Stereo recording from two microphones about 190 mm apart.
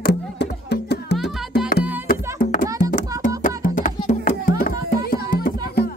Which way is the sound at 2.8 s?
45° left (ahead or behind).